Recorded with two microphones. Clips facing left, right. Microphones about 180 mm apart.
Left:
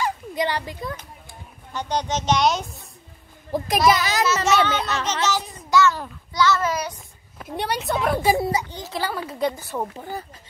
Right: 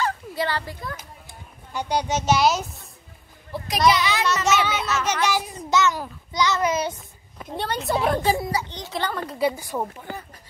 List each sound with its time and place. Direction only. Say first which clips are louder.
0.0 s a sound: left 1 dB; 15° left (ahead or behind)
1.7 s speech: right 1 dB; 10° right (ahead or behind)
3.5 s a child's voice: left 5 dB; 50° left (ahead or behind)
3.9 s a child's voice: left 1 dB; 40° left (ahead or behind)
4.5 s a child's voice: left 2 dB; 10° right (ahead or behind); by 7.0 s 25° right (ahead or behind)
7.5 s a child's voice: left 2 dB; 15° left (ahead or behind)
7.8 s a woman's voice: right 2 dB; 5° right (ahead or behind)
8.1 s a child's voice: left 3 dB; 10° left (ahead or behind)
8.4 s speech: left 3 dB; 20° left (ahead or behind)
8.6 s a child's voice: even; 5° left (ahead or behind)
9.3 s speech: right 1 dB; 5° right (ahead or behind)